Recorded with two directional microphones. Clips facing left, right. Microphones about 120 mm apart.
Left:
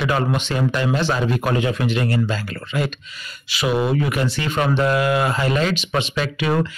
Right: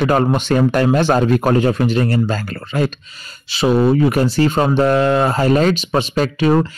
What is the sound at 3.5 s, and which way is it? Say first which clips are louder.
Speech: right 6 dB; 30° right (ahead or behind).